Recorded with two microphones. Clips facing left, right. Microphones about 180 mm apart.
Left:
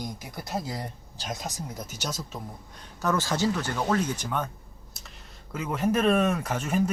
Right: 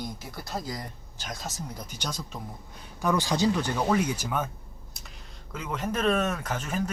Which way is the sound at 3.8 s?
5° right (ahead or behind).